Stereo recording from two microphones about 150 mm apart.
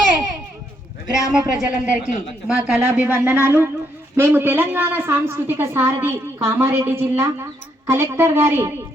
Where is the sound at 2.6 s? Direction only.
10° right (ahead or behind).